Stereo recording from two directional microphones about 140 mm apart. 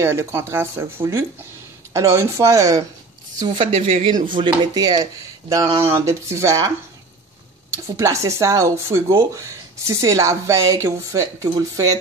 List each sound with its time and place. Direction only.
0.0 s speech: 20° right (ahead or behind)
3.3 s speech: 35° right (ahead or behind)
4.4 s speech: 30° right (ahead or behind)
7.7 s speech: 20° right (ahead or behind)